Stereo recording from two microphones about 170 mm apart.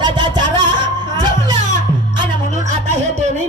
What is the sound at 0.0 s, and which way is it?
Music, 25° right (ahead or behind).